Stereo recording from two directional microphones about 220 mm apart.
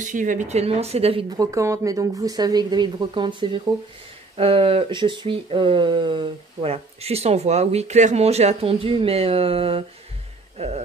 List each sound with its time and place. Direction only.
0.0 s speech: 35° right (ahead or behind)